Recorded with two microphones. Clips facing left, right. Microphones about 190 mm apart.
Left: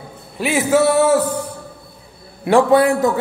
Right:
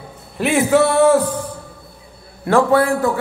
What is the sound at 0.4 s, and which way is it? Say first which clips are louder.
Speech: right 1 dB; centre (ahead or behind).